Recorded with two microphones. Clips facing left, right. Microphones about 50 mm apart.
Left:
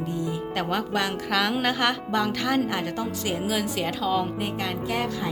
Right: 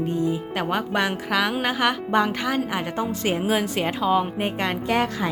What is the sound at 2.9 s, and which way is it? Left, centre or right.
A woman's voice, right.